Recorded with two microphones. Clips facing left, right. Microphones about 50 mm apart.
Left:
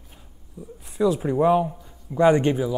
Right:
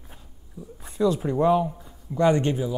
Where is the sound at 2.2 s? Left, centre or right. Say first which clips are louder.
Left 3 dB; left.